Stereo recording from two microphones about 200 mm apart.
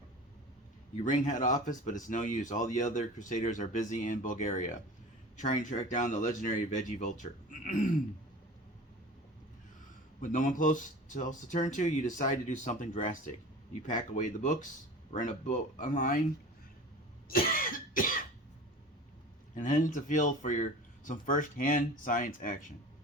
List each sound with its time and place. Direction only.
1.0 s speech: 40° left (ahead or behind)
10.2 s speech: 40° left (ahead or behind)
17.2 s cough: 45° left (ahead or behind)
19.5 s speech: 40° left (ahead or behind)